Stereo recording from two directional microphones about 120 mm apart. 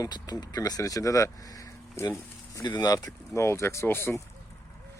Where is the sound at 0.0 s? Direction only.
35° left (ahead or behind).